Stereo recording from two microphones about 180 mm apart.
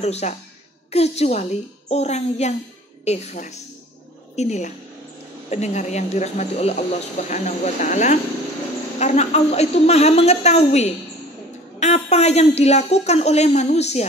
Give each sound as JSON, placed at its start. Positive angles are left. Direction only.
{"t": 0.0, "sound": "speech", "side_deg": 35}